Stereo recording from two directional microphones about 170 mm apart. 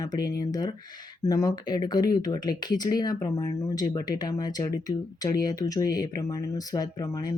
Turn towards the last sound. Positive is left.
turn(degrees=20)  # may be behind; listen again after turning